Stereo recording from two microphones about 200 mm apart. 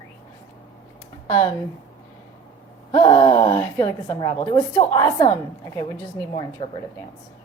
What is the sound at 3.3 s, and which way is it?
A woman's voice, 10° left (ahead or behind).